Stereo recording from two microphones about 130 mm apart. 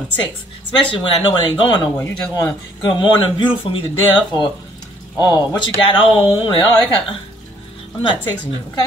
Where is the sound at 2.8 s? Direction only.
35° left (ahead or behind).